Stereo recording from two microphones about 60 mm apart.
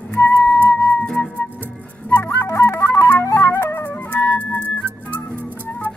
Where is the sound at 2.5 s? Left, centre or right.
Left.